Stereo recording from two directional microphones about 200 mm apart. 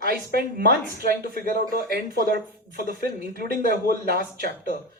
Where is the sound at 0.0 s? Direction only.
50° right (ahead or behind).